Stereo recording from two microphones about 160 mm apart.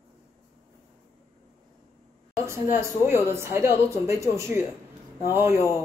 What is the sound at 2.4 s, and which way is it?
Speech, 15° right (ahead or behind).